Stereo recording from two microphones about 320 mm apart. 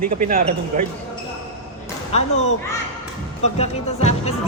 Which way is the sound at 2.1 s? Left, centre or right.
Left.